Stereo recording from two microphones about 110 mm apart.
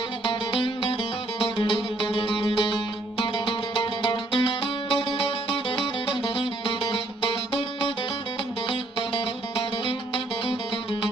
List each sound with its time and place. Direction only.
0.3 s music: 55° left (ahead or behind)